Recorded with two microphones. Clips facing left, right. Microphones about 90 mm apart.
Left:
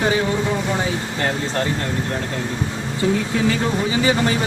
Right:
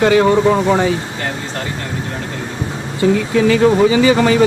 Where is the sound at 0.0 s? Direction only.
85° right.